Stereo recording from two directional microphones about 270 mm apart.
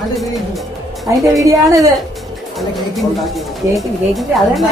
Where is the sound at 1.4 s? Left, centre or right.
Centre.